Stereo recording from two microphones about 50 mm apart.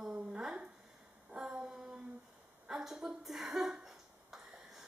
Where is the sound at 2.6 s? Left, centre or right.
Centre.